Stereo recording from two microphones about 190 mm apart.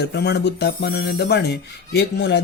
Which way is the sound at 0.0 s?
60° left (ahead or behind).